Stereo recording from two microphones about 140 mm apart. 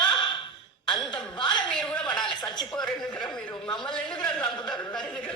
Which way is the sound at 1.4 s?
35° left (ahead or behind).